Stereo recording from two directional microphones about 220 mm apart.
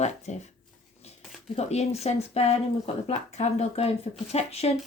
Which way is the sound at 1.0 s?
30° left (ahead or behind).